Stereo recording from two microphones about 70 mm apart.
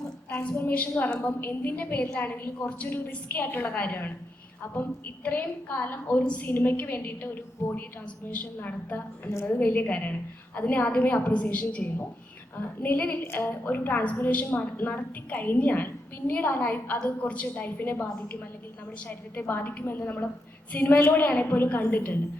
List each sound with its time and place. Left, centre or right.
0.3 s a woman's voice: left